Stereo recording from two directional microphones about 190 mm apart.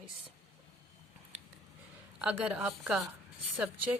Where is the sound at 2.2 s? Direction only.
5° right (ahead or behind).